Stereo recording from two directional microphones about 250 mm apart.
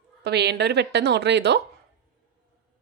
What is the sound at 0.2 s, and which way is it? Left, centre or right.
A woman's voice, right.